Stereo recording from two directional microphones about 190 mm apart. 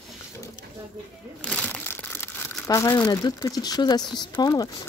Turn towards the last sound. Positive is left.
turn(degrees=20)  # may be behind; listen again after turning